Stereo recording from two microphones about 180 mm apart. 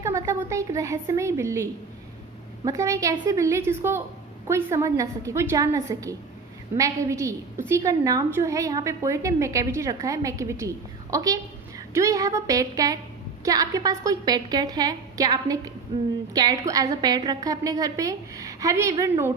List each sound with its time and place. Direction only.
0.0 s a woman's voice: 15° right (ahead or behind)